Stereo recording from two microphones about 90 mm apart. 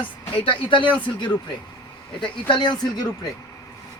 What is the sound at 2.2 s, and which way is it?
Speech, 60° left (ahead or behind).